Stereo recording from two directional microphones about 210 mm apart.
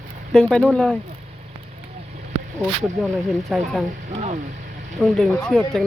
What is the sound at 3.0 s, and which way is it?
Speech, centre (ahead or behind).